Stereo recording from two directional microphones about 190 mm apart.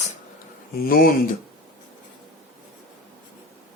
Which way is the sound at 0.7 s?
50° left (ahead or behind).